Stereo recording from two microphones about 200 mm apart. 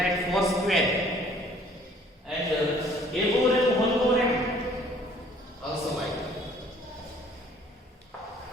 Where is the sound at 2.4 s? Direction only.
Centre (ahead or behind).